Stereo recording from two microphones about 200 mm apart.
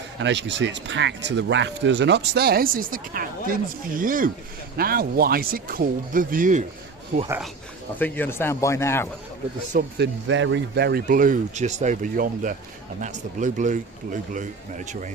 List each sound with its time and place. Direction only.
0.2 s speech: 60° right (ahead or behind); by 6.7 s 40° right (ahead or behind)
7.3 s speech: 5° right (ahead or behind)
7.9 s speech: 10° left (ahead or behind)
9.7 s speech: 45° right (ahead or behind)
10.2 s speech: 70° right (ahead or behind); by 15.1 s 40° right (ahead or behind)